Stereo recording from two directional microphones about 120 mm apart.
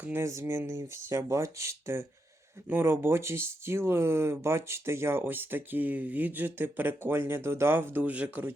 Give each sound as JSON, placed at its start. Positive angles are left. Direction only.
{"t": 0.0, "sound": "speech", "side_deg": -20}